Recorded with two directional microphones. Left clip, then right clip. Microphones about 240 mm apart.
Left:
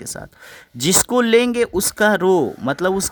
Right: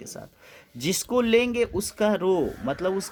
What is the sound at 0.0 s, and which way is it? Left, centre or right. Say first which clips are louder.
Speech: left 8 dB; left.